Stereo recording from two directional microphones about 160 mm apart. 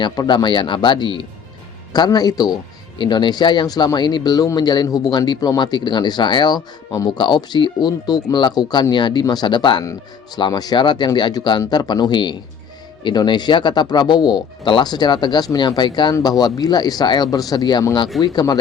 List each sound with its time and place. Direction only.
0.0 s speech: 25° left (ahead or behind)